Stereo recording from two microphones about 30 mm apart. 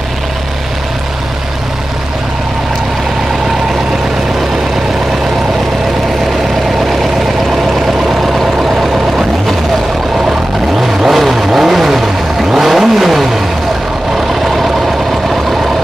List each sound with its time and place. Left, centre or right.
11.1 s vehicle: centre